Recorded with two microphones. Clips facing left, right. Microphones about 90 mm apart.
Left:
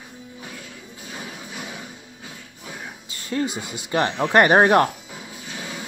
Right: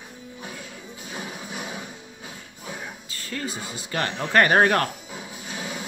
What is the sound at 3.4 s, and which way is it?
Speech, 35° right (ahead or behind).